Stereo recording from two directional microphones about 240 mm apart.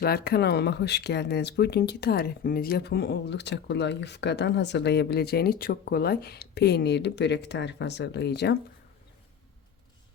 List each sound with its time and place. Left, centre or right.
0.0 s speech: left